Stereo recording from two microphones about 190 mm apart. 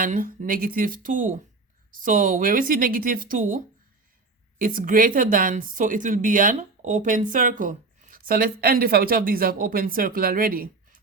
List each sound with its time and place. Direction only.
0.0 s speech: 45° right (ahead or behind)